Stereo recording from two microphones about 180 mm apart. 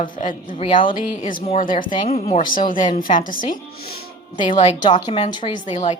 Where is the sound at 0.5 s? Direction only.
30° left (ahead or behind).